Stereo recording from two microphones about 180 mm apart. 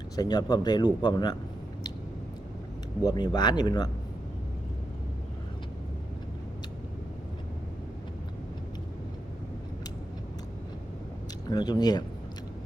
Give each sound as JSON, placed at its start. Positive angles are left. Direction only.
{"t": 0.2, "sound": "speech", "side_deg": 25}
{"t": 3.0, "sound": "speech", "side_deg": 20}
{"t": 11.4, "sound": "speech", "side_deg": 25}